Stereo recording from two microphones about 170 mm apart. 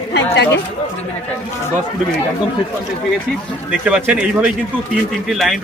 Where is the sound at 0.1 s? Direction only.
90° left.